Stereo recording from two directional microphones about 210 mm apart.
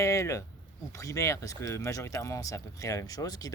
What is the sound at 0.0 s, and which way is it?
Speech, 15° left (ahead or behind).